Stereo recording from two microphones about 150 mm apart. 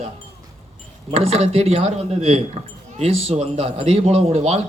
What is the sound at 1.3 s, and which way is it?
A man's voice, 45° right (ahead or behind).